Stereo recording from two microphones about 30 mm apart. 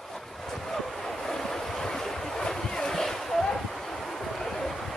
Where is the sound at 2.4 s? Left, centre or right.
Centre.